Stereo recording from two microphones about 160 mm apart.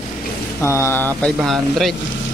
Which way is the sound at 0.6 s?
15° left (ahead or behind).